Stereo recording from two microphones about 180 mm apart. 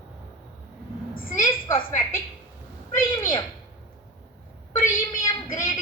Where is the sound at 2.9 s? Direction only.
15° left (ahead or behind).